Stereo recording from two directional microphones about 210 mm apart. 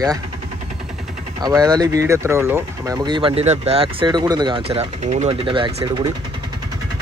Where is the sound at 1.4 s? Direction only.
20° right (ahead or behind).